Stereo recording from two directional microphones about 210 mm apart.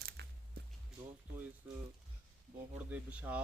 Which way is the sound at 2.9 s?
5° right (ahead or behind).